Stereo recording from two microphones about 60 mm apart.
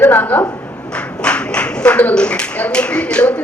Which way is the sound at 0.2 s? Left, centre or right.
Left.